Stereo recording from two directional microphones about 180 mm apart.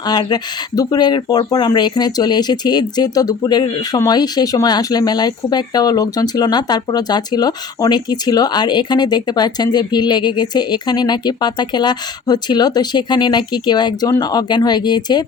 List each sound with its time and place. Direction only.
0.1 s speech: 20° left (ahead or behind)